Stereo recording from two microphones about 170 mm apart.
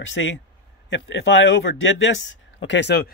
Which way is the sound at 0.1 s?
90° left.